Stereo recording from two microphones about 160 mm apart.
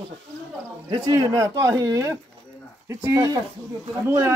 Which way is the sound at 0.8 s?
25° right (ahead or behind).